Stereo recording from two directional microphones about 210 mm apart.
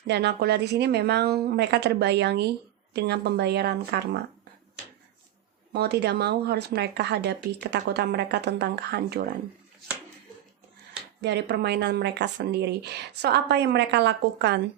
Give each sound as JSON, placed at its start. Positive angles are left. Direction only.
{"t": 0.1, "sound": "a woman's voice", "side_deg": -55}
{"t": 5.7, "sound": "a woman's voice", "side_deg": -50}
{"t": 11.2, "sound": "a woman's voice", "side_deg": -55}